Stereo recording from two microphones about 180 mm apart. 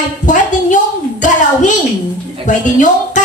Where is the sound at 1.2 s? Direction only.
45° left (ahead or behind).